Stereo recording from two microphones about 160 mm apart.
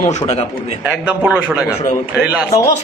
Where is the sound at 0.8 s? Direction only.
5° right (ahead or behind).